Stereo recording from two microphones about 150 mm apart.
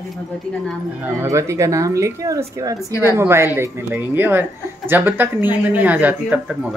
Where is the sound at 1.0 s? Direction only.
20° right (ahead or behind).